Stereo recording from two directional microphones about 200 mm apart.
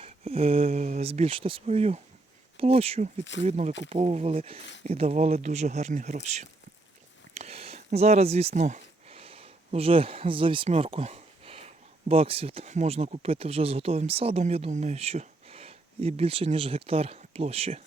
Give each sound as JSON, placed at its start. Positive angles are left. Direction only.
{"t": 0.0, "sound": "speech", "side_deg": -30}